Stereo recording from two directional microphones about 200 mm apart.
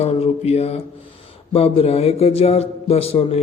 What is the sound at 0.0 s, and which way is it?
A man's voice, 30° left (ahead or behind).